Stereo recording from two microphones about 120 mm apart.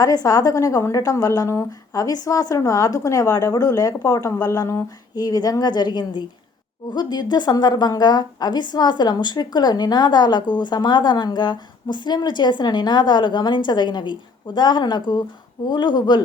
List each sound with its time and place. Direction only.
0.0 s a woman's voice: 30° left (ahead or behind)